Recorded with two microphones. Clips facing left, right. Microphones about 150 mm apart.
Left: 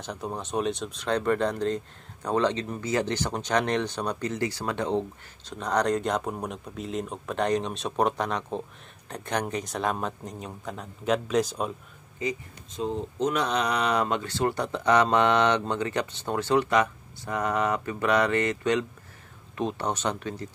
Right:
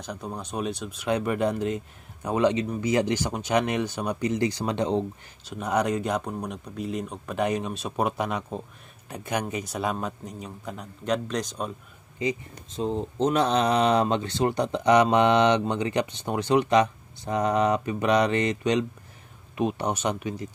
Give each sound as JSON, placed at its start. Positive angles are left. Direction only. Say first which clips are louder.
{"t": 0.0, "sound": "speech", "louder": "left 1 dB", "side_deg": 0}
{"t": 12.2, "sound": "speech", "louder": "right 3 dB", "side_deg": -25}